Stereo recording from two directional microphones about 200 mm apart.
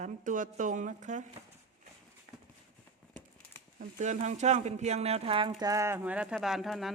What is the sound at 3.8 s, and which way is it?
Speech, 35° right (ahead or behind).